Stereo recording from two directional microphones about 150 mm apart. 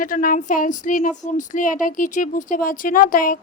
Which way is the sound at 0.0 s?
65° left (ahead or behind).